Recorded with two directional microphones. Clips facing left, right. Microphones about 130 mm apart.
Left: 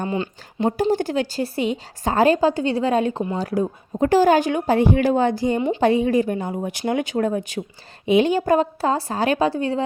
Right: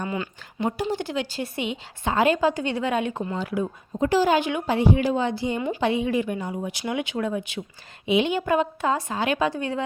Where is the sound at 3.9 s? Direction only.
50° left (ahead or behind).